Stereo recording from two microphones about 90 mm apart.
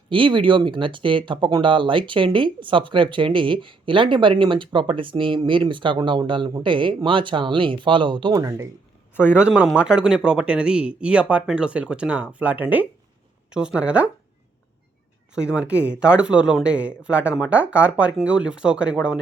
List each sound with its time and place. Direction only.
0.1 s speech: 70° right (ahead or behind)
8.4 s speech: 30° right (ahead or behind)
9.3 s speech: 15° right (ahead or behind)
15.4 s speech: 15° right (ahead or behind)